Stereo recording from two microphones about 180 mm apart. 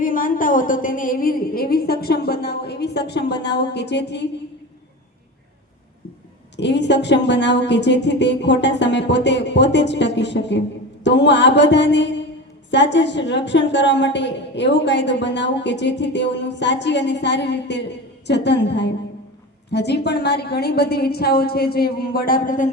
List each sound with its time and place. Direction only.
0.0 s a woman's voice: 50° left (ahead or behind); by 4.3 s 70° left (ahead or behind)
6.6 s a woman's voice: 75° left (ahead or behind); by 22.7 s 45° left (ahead or behind)